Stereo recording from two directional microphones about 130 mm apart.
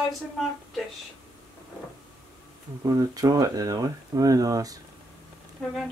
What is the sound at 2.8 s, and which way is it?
Speech, 25° right (ahead or behind).